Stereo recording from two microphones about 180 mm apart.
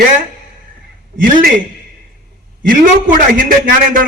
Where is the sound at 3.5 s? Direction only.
50° right (ahead or behind).